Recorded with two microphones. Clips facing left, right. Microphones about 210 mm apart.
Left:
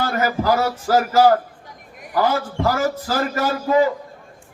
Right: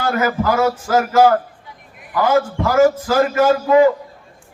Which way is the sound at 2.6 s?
35° left (ahead or behind).